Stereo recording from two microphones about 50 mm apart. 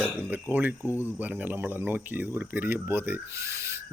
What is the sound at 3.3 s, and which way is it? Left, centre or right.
Speech, right.